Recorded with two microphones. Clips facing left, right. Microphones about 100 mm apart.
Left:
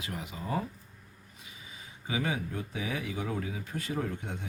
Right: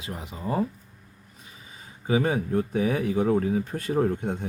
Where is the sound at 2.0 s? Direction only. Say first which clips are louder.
Right 9 dB; 40° right (ahead or behind).